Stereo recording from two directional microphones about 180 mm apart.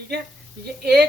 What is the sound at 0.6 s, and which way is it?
Speech, 65° right (ahead or behind).